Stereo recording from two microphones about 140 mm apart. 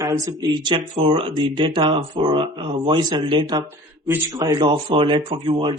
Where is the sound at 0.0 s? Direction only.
30° right (ahead or behind).